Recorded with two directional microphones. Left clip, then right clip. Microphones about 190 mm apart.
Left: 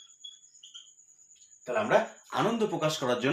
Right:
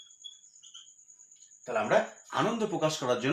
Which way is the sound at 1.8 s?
25° left (ahead or behind).